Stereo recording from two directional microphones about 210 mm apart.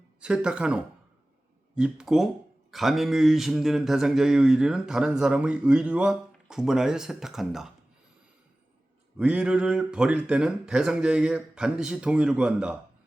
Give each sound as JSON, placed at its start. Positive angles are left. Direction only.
{"t": 0.2, "sound": "speech", "side_deg": -5}
{"t": 9.1, "sound": "speech", "side_deg": -5}